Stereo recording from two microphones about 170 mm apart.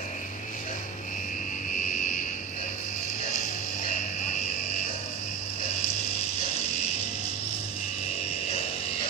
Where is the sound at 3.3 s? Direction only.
45° left (ahead or behind).